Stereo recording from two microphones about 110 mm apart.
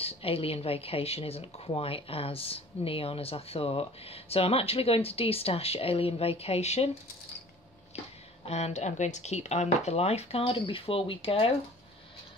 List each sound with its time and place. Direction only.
0.0 s speech: 60° left (ahead or behind)
8.5 s speech: 75° left (ahead or behind); by 11.5 s 60° left (ahead or behind)